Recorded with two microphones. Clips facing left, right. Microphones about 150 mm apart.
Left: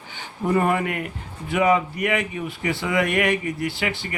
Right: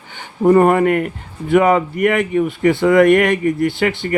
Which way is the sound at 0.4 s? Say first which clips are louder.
Right 10 dB; 50° right (ahead or behind).